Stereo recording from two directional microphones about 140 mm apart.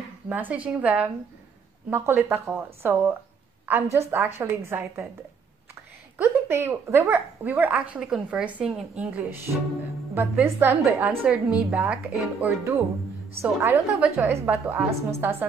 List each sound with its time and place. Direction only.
0.3 s speech: 10° right (ahead or behind)
6.1 s speech: 15° right (ahead or behind)